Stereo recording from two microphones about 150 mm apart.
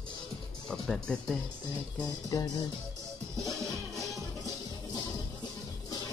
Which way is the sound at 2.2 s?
25° left (ahead or behind).